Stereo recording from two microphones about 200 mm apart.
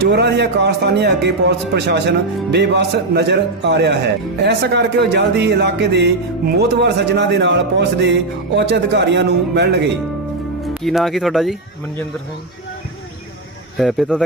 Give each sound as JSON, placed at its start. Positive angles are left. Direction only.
{"t": 0.0, "sound": "a man's voice", "side_deg": -60}
{"t": 10.8, "sound": "speech", "side_deg": 0}
{"t": 13.7, "sound": "speech", "side_deg": 0}